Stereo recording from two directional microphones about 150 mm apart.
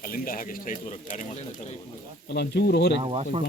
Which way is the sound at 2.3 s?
90° left.